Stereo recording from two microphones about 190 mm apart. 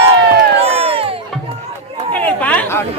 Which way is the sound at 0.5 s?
30° right (ahead or behind).